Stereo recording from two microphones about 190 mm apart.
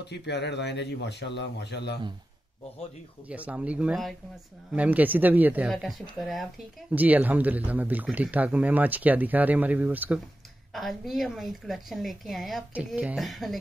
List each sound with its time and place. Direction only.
0.0 s speech: 60° left (ahead or behind)
3.3 s a woman's voice: 5° right (ahead or behind)